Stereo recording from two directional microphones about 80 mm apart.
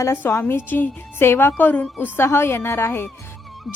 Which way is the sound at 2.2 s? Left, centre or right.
Left.